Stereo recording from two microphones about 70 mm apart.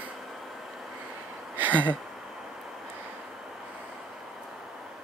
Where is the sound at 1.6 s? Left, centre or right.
Right.